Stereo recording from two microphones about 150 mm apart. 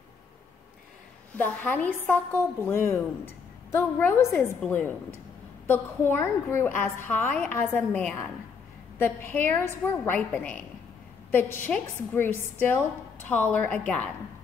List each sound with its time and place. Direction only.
1.3 s a woman's voice: 10° left (ahead or behind)